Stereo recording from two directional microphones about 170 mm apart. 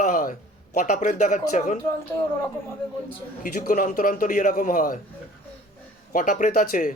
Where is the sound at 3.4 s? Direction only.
55° left (ahead or behind).